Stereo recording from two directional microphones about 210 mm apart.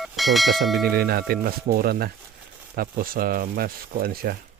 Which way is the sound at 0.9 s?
45° right (ahead or behind).